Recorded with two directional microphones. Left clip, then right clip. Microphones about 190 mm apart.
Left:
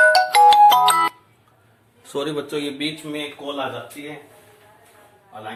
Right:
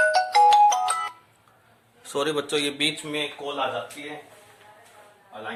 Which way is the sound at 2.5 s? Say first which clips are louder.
Right 1 dB; 40° right (ahead or behind).